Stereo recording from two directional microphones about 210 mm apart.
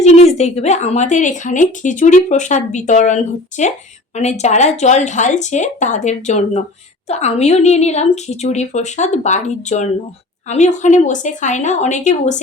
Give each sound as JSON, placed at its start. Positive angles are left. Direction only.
{"t": 0.0, "sound": "speech", "side_deg": 30}